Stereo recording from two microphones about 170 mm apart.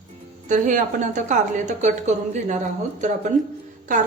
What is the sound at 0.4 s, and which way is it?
A woman's voice, 50° right (ahead or behind).